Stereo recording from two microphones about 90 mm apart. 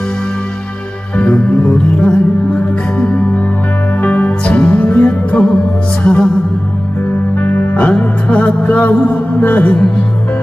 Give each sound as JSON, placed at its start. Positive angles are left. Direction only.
{"t": 1.1, "sound": "music", "side_deg": 15}
{"t": 7.3, "sound": "music", "side_deg": 20}